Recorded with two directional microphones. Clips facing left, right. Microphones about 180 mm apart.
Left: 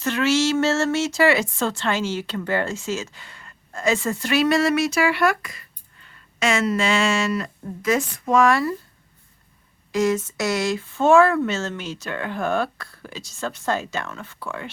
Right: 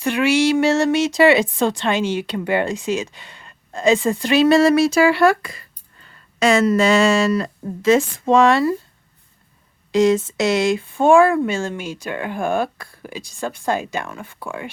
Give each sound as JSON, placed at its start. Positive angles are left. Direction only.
{"t": 0.0, "sound": "speech", "side_deg": -15}
{"t": 9.9, "sound": "speech", "side_deg": -25}